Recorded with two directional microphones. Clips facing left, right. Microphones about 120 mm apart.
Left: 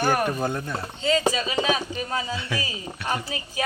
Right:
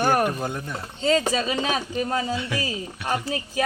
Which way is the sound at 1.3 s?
40° right (ahead or behind).